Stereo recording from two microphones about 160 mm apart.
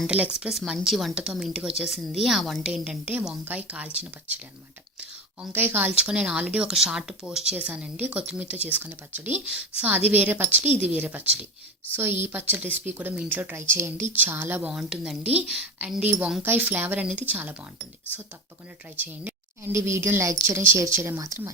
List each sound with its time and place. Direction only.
0.1 s a woman's voice: 5° right (ahead or behind)
18.9 s a woman's voice: 10° right (ahead or behind)